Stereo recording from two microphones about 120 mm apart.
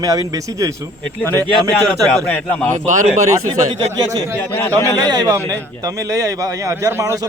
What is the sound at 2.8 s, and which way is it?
Speech, 85° right.